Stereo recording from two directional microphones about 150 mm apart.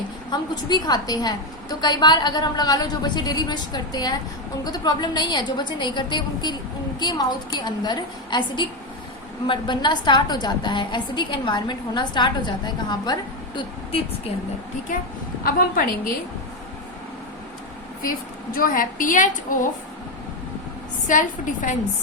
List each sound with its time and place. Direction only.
0.3 s a woman's voice: 25° left (ahead or behind)
15.4 s a woman's voice: 70° left (ahead or behind)
18.5 s a woman's voice: 70° left (ahead or behind)
21.1 s a woman's voice: 60° left (ahead or behind)